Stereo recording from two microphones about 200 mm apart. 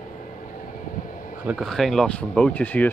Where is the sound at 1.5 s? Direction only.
Centre (ahead or behind).